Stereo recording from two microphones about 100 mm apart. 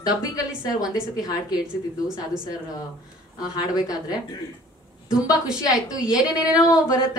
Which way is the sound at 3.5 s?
40° left (ahead or behind).